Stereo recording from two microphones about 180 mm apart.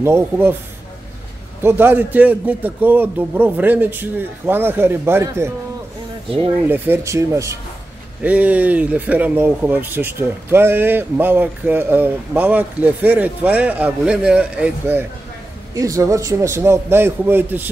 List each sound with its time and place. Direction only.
0.0 s speech: 15° right (ahead or behind)
1.6 s speech: 10° right (ahead or behind)
6.2 s speech: 30° right (ahead or behind)
6.7 s speech: 15° right (ahead or behind)